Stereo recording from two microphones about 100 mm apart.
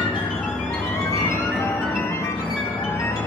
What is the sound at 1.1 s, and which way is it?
Music, 25° left (ahead or behind).